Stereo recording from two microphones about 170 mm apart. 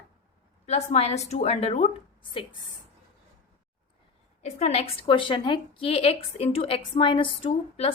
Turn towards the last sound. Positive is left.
turn(degrees=35)  # may be behind; listen again after turning